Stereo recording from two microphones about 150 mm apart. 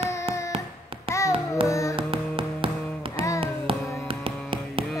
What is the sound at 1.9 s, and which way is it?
Music, 35° right (ahead or behind).